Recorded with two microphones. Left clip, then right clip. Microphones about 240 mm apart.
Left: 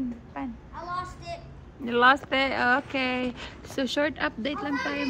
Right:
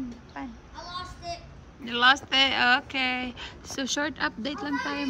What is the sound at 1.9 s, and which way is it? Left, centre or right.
A woman's voice, centre.